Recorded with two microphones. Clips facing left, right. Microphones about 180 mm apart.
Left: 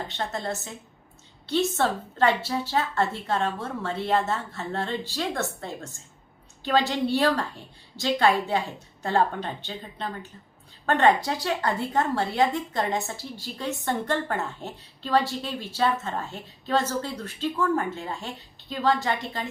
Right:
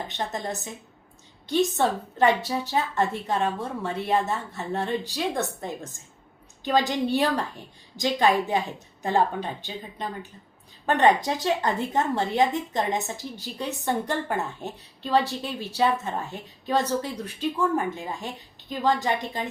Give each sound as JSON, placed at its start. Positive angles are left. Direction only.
{"t": 0.1, "sound": "a woman's voice", "side_deg": -15}